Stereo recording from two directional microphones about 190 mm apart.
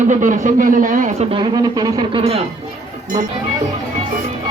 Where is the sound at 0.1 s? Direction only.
40° right (ahead or behind).